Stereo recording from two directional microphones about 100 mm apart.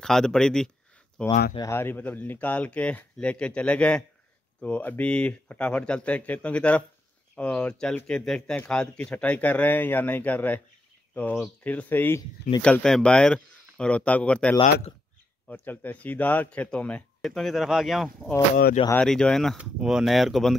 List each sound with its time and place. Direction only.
0.0 s speech: 5° left (ahead or behind)
1.7 s speech: 20° left (ahead or behind)
12.6 s speech: 10° left (ahead or behind)
19.5 s speech: 5° right (ahead or behind)